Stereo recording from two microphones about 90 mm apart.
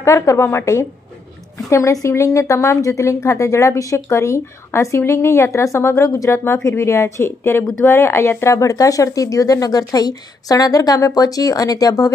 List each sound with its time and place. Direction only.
0.0 s a woman's voice: 35° left (ahead or behind)